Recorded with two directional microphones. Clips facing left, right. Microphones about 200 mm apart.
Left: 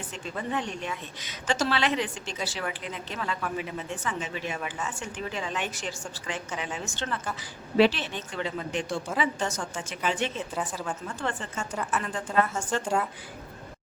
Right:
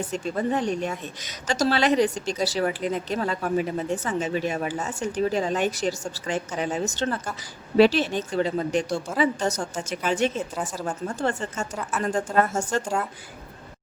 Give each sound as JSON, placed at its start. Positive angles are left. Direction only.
{"t": 0.1, "sound": "a woman's voice", "side_deg": -40}
{"t": 11.7, "sound": "speech", "side_deg": 0}
{"t": 12.0, "sound": "a woman's voice", "side_deg": -45}
{"t": 12.8, "sound": "speech", "side_deg": 0}